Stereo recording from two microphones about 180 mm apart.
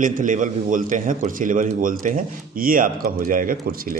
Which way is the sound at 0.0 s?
45° right (ahead or behind).